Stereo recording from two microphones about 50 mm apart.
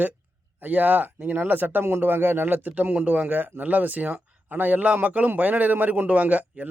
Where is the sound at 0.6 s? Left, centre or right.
Right.